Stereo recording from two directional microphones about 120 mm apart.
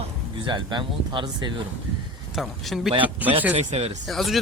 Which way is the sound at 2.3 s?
Centre (ahead or behind).